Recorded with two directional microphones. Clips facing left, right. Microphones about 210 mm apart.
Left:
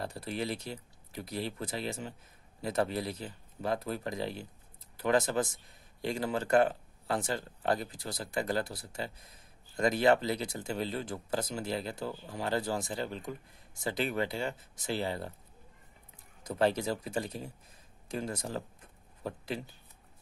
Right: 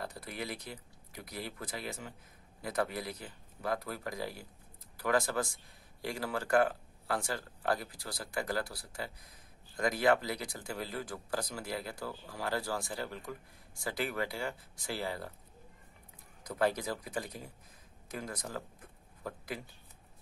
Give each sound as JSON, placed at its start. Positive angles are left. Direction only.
{"t": 0.0, "sound": "speech", "side_deg": 30}
{"t": 16.4, "sound": "speech", "side_deg": 25}